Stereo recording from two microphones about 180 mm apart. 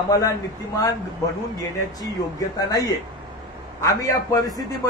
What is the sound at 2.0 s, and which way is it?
A man's voice, 20° left (ahead or behind).